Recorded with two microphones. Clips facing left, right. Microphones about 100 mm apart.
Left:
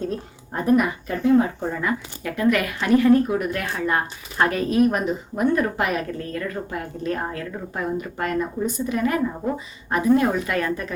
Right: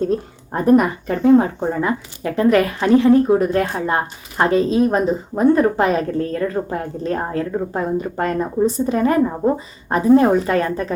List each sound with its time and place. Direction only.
0.5 s a woman's voice: 40° right (ahead or behind)
1.8 s a woman's voice: 30° right (ahead or behind)